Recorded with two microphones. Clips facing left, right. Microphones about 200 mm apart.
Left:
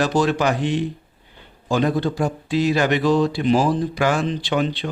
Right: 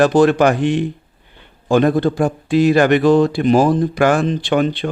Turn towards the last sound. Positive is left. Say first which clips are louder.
# right 5 dB
turn(degrees=-55)  # may be behind; listen again after turning